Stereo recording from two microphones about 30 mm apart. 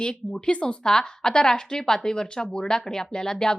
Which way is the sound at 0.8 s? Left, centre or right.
Left.